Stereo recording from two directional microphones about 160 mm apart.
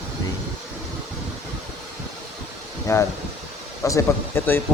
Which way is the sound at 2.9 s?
20° left (ahead or behind).